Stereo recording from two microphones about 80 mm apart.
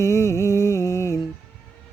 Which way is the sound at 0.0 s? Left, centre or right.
Left.